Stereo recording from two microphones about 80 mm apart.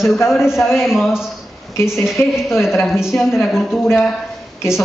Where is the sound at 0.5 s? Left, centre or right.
Left.